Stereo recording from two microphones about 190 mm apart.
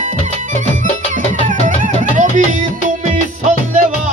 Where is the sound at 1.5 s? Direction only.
45° right (ahead or behind).